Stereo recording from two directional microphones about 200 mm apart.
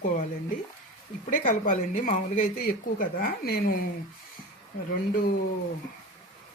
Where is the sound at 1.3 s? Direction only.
40° left (ahead or behind).